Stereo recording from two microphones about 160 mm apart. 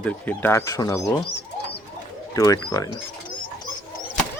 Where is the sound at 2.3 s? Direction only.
20° left (ahead or behind).